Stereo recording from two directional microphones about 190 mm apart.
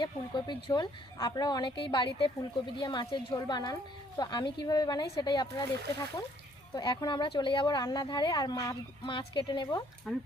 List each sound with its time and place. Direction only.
0.0 s speech: 20° left (ahead or behind)
6.7 s speech: 20° left (ahead or behind)
10.1 s speech: centre (ahead or behind)